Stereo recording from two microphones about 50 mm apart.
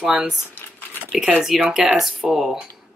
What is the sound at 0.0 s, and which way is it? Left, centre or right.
Speech, centre.